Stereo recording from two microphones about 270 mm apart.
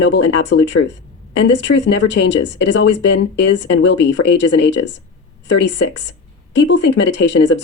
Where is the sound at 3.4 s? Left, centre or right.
Left.